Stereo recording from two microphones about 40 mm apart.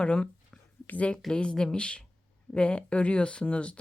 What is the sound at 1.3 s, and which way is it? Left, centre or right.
A woman's voice, left.